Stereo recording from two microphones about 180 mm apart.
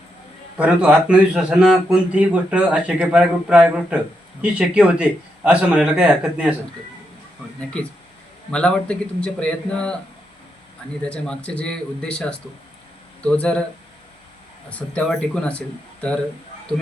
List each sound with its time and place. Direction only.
0.6 s a man's voice: 5° right (ahead or behind)
8.5 s a man's voice: 5° left (ahead or behind)
11.1 s a man's voice: 5° left (ahead or behind)
14.8 s speech: 5° left (ahead or behind)